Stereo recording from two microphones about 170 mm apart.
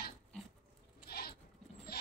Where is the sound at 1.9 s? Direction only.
70° left (ahead or behind).